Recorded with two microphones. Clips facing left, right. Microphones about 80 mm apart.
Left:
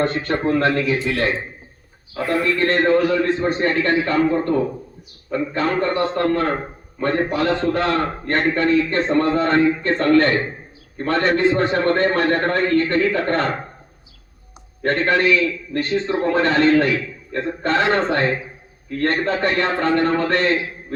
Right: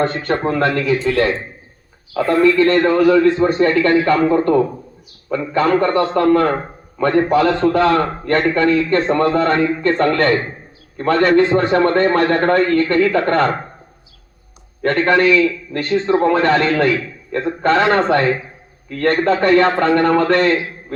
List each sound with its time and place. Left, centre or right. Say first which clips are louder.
0.0 s speech: right 2 dB; right
0.5 s a man's voice: even; right
2.6 s a man's voice: right 3 dB; right
12.4 s a man's voice: right 4 dB; right
14.8 s a man's voice: right 4 dB; right